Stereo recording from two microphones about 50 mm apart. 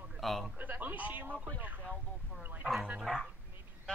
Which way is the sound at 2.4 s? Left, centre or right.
Right.